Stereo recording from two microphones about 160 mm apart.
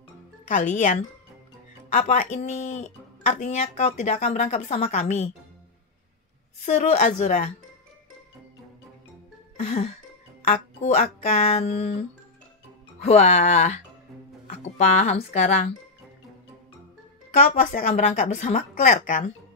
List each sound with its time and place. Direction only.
0.5 s speech: 50° left (ahead or behind)
2.0 s speech: 45° left (ahead or behind)
6.6 s speech: 45° left (ahead or behind)
9.6 s speech: 45° left (ahead or behind)
13.0 s speech: 45° left (ahead or behind)
17.3 s speech: 45° left (ahead or behind)